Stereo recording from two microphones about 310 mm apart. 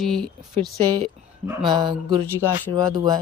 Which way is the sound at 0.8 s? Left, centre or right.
Centre.